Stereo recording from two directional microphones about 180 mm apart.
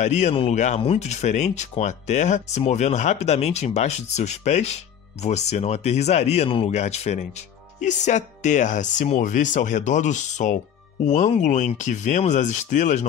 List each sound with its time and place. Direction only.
0.0 s speech: 40° left (ahead or behind)